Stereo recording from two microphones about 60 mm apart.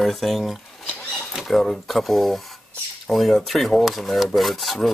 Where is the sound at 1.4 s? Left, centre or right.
Centre.